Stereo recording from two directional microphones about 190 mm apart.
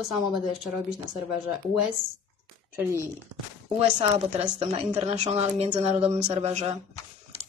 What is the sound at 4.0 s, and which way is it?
Speech, 30° right (ahead or behind).